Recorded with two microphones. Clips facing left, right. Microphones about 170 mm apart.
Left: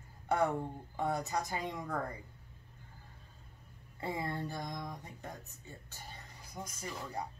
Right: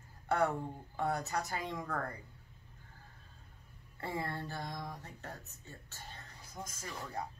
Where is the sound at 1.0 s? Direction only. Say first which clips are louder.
Left 1 dB; 15° left (ahead or behind).